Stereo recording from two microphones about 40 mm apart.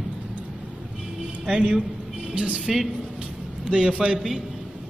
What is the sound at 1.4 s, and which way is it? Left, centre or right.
Speech, right.